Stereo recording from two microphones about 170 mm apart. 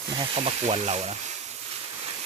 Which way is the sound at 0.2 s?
35° right (ahead or behind).